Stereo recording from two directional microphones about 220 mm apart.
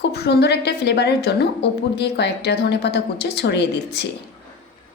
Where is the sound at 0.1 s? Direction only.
50° left (ahead or behind).